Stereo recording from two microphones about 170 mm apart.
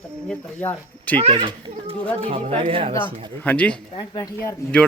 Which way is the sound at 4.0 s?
20° left (ahead or behind).